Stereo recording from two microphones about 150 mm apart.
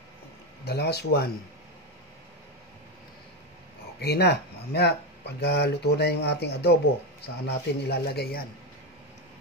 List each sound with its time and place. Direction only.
0.7 s speech: 90° left
4.0 s speech: 90° left